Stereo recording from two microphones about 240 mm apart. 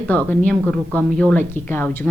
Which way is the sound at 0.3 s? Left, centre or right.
Centre.